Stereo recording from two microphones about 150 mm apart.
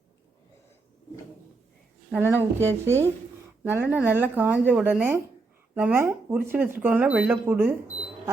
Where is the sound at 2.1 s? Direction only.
15° right (ahead or behind).